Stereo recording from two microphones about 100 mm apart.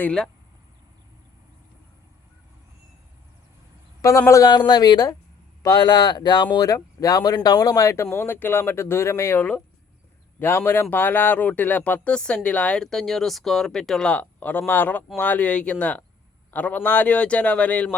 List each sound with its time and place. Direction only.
0.0 s speech: 10° left (ahead or behind)
4.3 s speech: 35° left (ahead or behind)
4.5 s speech: 45° left (ahead or behind); by 9.4 s 30° left (ahead or behind)
9.4 s speech: 15° left (ahead or behind)